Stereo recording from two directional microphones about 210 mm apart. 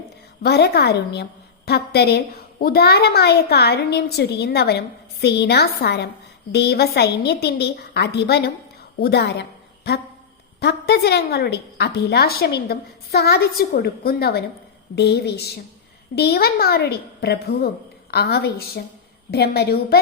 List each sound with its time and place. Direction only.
0.4 s a woman's voice: 50° left (ahead or behind)